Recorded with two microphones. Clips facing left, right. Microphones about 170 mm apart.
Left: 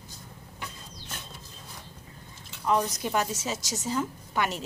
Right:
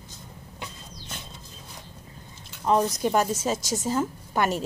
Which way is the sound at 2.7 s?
35° right (ahead or behind).